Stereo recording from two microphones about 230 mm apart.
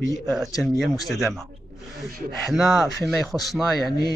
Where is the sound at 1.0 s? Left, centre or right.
Centre.